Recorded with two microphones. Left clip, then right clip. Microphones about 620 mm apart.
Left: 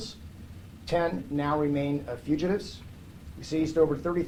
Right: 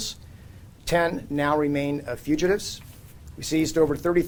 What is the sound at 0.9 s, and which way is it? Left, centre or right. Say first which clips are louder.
Speech: right 5 dB; right.